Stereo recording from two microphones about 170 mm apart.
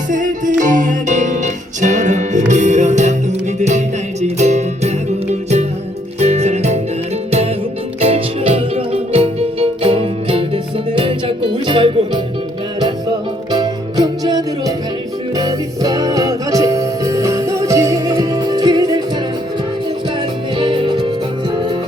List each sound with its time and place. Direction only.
0.1 s music: 50° right (ahead or behind)
8.0 s music: 35° right (ahead or behind)
13.5 s music: 25° right (ahead or behind)
20.6 s music: 30° right (ahead or behind)